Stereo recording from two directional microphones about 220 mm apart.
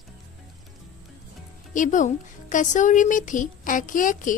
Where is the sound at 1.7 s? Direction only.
35° left (ahead or behind).